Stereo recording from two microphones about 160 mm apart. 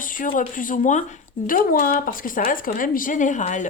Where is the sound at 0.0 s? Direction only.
60° left (ahead or behind).